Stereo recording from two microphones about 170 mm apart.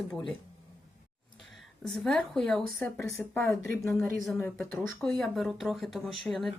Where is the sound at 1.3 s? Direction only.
Centre (ahead or behind).